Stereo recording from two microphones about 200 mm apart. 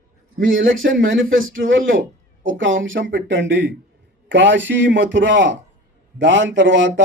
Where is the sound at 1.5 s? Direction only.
75° right (ahead or behind).